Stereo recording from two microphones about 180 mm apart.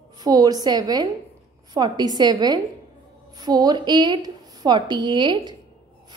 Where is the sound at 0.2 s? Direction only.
20° right (ahead or behind).